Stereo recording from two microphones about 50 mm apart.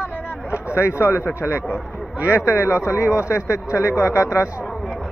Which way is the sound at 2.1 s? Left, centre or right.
Right.